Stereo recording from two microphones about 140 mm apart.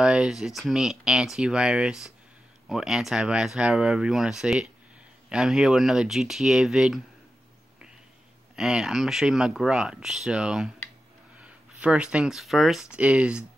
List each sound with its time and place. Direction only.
0.0 s speech: 5° right (ahead or behind)
8.5 s speech: 5° right (ahead or behind)